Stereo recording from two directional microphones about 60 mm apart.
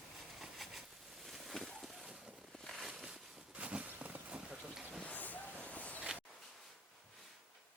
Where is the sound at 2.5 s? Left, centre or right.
Centre.